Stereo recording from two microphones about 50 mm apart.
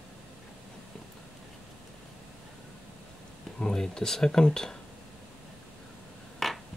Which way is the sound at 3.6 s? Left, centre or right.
Centre.